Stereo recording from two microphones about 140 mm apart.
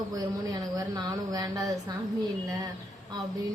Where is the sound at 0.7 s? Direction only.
25° right (ahead or behind).